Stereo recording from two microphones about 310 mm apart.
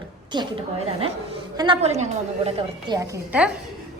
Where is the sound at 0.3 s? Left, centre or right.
Centre.